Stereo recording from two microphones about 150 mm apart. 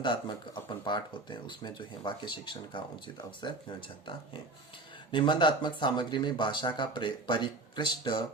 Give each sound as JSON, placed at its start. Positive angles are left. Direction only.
{"t": 0.0, "sound": "speech", "side_deg": 30}
{"t": 5.1, "sound": "speech", "side_deg": 30}